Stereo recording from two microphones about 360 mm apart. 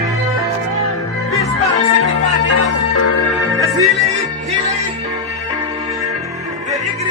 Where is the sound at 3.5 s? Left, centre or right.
Centre.